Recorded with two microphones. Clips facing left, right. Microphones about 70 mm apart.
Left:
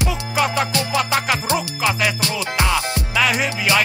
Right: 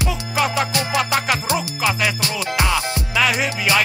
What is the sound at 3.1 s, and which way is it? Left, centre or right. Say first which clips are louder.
Music: even; centre.